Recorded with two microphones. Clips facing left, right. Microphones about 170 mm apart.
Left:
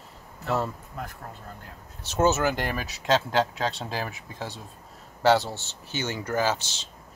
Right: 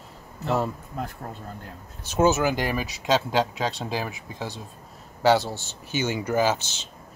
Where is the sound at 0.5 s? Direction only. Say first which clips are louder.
Right 2 dB; 15° right (ahead or behind).